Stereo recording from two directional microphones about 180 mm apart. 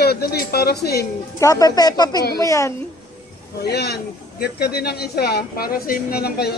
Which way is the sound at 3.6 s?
65° left (ahead or behind).